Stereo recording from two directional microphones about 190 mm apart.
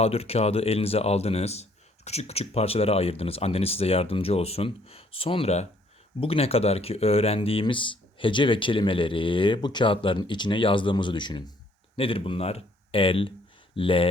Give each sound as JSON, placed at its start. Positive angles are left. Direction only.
{"t": 0.0, "sound": "speech", "side_deg": 30}